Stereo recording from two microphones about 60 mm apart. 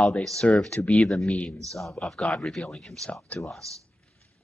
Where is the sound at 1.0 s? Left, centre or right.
Centre.